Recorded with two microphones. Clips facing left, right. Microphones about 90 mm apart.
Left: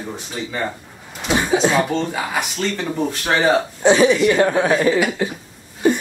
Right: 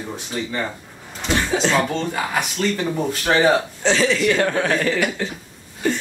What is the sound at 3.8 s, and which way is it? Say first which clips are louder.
Speech: left 5 dB; 15° left (ahead or behind).